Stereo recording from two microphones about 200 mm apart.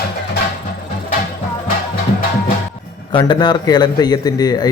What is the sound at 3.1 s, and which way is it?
A man's voice, 20° left (ahead or behind).